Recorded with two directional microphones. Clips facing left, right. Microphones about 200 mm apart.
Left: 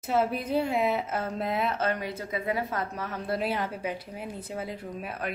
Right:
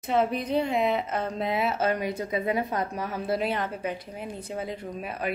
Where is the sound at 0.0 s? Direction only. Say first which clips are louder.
Right 2 dB; 5° left (ahead or behind).